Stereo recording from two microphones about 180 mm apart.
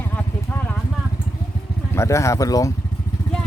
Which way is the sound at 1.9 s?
15° left (ahead or behind).